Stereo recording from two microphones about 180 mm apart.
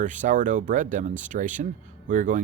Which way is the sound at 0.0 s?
45° right (ahead or behind).